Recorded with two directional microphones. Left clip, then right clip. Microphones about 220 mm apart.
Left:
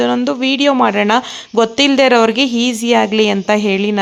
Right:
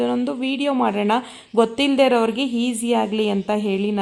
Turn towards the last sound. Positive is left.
turn(degrees=20)  # may be behind; listen again after turning